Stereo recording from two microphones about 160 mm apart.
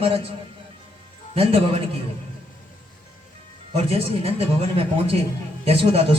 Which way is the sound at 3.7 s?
40° right (ahead or behind).